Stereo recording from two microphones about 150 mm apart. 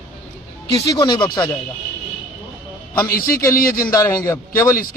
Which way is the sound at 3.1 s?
75° left (ahead or behind).